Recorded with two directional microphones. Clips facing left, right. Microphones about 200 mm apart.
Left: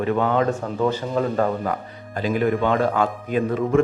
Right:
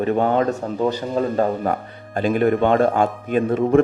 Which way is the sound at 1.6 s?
50° right (ahead or behind).